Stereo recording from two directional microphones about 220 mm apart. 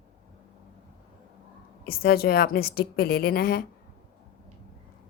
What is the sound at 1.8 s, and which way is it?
A woman's voice, 45° left (ahead or behind).